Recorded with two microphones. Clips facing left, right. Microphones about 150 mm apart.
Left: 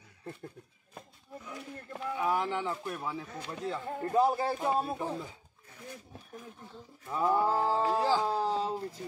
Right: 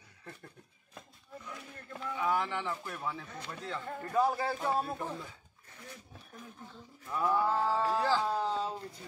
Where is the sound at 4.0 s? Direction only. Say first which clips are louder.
Left 3 dB; 30° left (ahead or behind).